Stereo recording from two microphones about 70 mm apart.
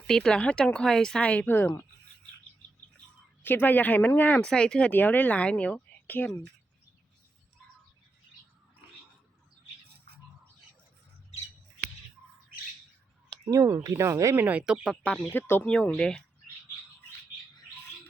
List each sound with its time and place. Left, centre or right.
0.1 s speech: centre
3.4 s speech: left; by 4.9 s centre
4.9 s speech: left
13.5 s speech: right
14.3 s speech: right
15.3 s speech: left
15.6 s speech: centre